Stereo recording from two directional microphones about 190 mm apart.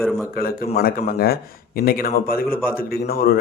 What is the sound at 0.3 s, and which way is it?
Speech, 50° left (ahead or behind).